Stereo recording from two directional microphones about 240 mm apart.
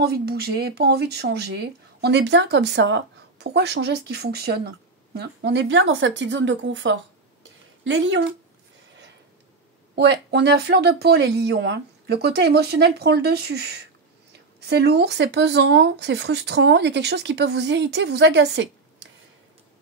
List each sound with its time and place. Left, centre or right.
0.0 s speech: right
9.9 s speech: right